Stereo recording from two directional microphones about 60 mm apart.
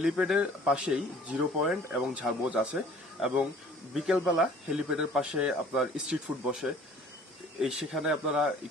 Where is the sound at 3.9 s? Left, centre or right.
Centre.